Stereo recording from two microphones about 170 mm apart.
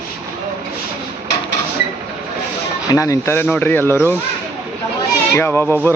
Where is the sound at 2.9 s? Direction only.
20° left (ahead or behind).